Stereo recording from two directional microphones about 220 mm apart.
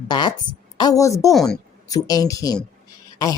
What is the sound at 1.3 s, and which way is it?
Speech, centre (ahead or behind).